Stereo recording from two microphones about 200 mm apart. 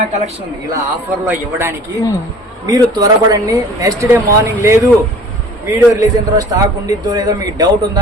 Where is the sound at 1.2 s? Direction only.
10° right (ahead or behind).